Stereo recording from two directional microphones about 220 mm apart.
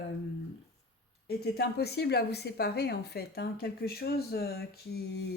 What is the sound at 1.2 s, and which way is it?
A woman's voice, 45° left (ahead or behind).